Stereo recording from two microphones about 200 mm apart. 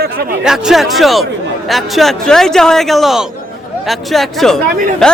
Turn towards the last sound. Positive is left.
turn(degrees=5)  # may be behind; listen again after turning